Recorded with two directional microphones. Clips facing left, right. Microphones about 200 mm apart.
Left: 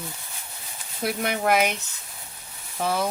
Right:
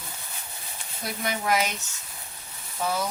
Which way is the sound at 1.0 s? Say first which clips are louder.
Left 4 dB; 60° left (ahead or behind).